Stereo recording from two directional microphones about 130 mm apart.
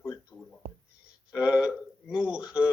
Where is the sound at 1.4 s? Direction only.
5° right (ahead or behind).